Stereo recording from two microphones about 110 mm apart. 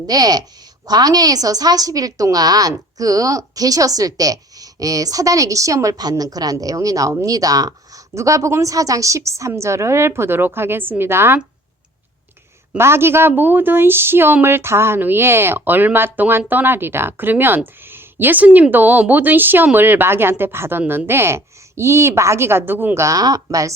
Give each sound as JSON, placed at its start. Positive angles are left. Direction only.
{"t": 0.1, "sound": "a woman's voice", "side_deg": -35}
{"t": 12.7, "sound": "a woman's voice", "side_deg": -20}
{"t": 23.0, "sound": "a woman's voice", "side_deg": -35}